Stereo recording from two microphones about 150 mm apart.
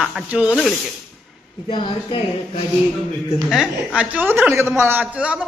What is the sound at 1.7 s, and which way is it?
Speech, 35° left (ahead or behind).